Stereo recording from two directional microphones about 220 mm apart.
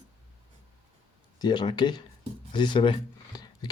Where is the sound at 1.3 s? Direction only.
20° left (ahead or behind).